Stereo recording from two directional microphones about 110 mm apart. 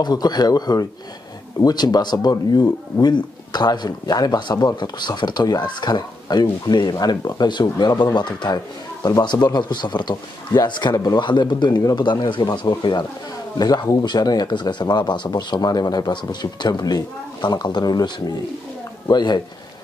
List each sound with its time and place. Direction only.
0.0 s speech: 40° left (ahead or behind)